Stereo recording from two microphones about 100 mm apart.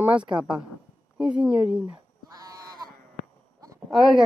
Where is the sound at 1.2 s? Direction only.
10° right (ahead or behind).